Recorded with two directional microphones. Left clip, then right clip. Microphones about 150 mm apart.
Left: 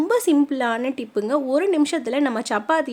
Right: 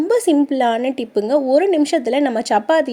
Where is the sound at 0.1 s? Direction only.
10° right (ahead or behind).